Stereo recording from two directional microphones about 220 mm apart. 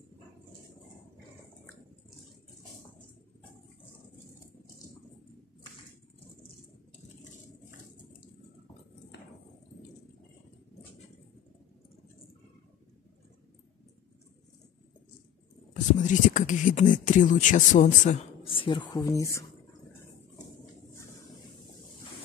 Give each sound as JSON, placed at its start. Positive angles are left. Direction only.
{"t": 15.7, "sound": "speech", "side_deg": 35}